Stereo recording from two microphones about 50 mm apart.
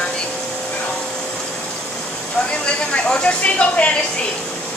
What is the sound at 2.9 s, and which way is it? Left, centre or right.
Speech, left.